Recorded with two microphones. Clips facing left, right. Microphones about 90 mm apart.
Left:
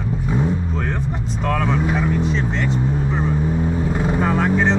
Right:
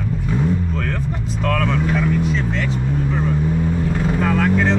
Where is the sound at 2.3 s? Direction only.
30° left (ahead or behind).